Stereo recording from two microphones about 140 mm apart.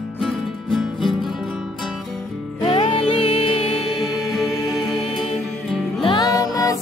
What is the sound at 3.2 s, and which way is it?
Music, 40° left (ahead or behind).